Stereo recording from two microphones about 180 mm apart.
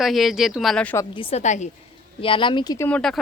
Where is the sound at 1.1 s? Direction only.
35° left (ahead or behind).